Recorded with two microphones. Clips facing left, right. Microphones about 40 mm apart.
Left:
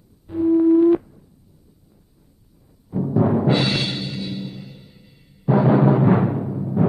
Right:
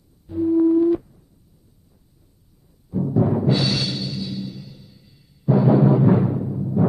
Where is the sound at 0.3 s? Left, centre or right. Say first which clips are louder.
Left 2 dB; left.